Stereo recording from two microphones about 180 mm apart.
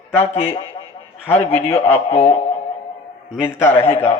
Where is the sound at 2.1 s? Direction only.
35° left (ahead or behind).